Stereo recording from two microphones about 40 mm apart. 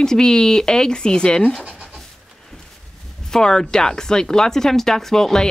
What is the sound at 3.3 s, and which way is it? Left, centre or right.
Speech, centre.